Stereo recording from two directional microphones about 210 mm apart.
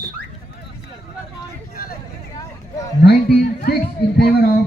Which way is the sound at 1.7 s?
45° left (ahead or behind).